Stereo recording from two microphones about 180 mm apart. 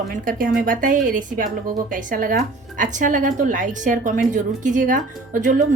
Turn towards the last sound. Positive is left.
turn(degrees=-45)  # may be behind; listen again after turning